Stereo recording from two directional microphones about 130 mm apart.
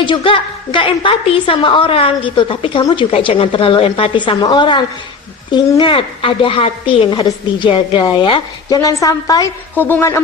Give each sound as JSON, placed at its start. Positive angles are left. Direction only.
{"t": 0.0, "sound": "a woman's voice", "side_deg": 40}
{"t": 9.8, "sound": "speech", "side_deg": 15}